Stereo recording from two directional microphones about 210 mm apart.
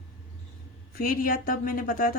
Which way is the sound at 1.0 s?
45° left (ahead or behind).